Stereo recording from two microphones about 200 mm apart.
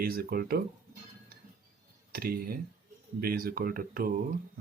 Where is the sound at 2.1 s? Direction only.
50° right (ahead or behind).